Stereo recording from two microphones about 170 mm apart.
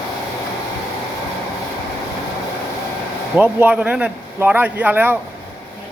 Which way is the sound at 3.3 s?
10° right (ahead or behind).